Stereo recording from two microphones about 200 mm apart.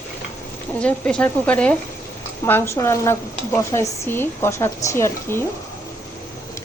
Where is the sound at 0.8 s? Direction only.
5° left (ahead or behind).